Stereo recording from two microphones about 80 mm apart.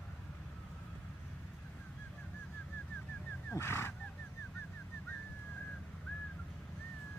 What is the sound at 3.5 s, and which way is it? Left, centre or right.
Speech, left.